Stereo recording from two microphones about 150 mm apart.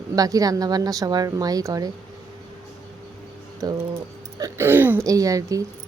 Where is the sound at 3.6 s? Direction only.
25° right (ahead or behind).